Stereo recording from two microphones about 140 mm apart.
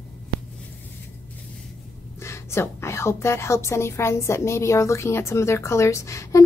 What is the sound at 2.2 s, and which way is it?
A woman's voice, 20° left (ahead or behind).